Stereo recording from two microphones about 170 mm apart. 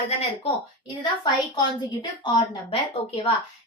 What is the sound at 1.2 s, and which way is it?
A woman's voice, 25° left (ahead or behind).